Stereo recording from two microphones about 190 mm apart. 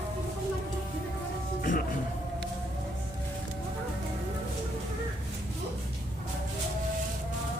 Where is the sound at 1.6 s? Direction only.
45° left (ahead or behind).